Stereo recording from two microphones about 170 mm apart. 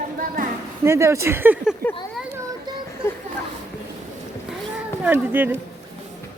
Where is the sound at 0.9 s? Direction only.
15° right (ahead or behind).